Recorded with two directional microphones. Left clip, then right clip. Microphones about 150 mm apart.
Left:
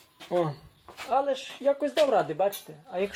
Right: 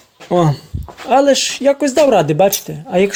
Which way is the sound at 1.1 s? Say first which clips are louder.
Right 15 dB; 55° right (ahead or behind).